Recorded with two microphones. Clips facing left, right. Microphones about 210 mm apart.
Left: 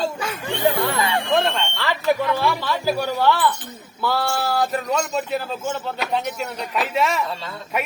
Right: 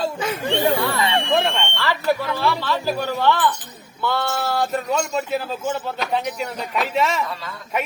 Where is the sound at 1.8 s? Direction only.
15° left (ahead or behind).